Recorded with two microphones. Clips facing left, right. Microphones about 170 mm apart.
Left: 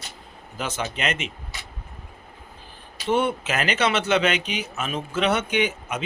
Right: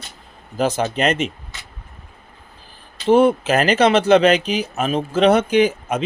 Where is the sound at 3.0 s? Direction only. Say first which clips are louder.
Right 9 dB; 35° right (ahead or behind).